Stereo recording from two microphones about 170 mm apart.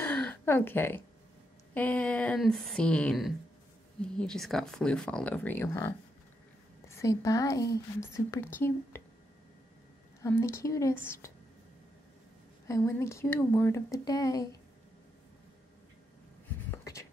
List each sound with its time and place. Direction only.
0.0 s a sound: 10° left (ahead or behind)
1.7 s speech: 10° left (ahead or behind)
10.2 s speech: 15° left (ahead or behind)
12.6 s speech: 15° left (ahead or behind)
16.7 s writing: 15° left (ahead or behind)